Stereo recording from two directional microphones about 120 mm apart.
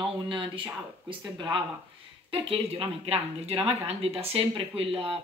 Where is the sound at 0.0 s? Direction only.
45° right (ahead or behind).